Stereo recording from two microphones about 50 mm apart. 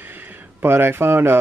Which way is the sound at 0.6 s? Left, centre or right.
Right.